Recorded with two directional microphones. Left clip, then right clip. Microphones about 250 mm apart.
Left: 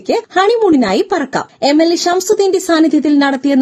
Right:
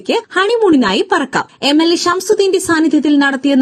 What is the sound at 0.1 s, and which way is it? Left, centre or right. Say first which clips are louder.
A woman's voice: left 2 dB; centre.